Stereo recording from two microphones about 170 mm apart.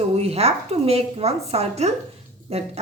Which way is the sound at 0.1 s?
35° right (ahead or behind).